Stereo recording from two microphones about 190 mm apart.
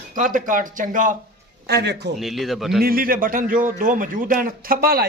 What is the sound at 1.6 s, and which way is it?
Speech, 60° right (ahead or behind).